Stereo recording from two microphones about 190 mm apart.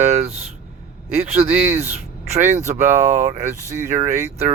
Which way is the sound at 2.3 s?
40° right (ahead or behind).